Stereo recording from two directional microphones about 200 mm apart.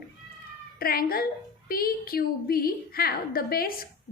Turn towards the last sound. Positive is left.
turn(degrees=45)  # may be behind; listen again after turning